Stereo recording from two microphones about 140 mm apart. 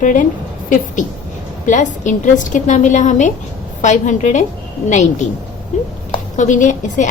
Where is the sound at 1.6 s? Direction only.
60° left (ahead or behind).